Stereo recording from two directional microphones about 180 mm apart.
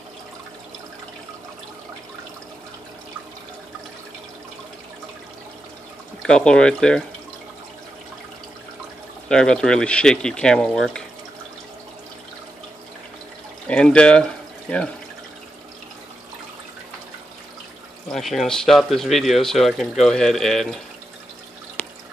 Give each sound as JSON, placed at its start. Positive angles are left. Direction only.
{"t": 6.2, "sound": "speech", "side_deg": 5}
{"t": 9.3, "sound": "speech", "side_deg": 5}
{"t": 13.7, "sound": "speech", "side_deg": 5}
{"t": 18.1, "sound": "speech", "side_deg": 0}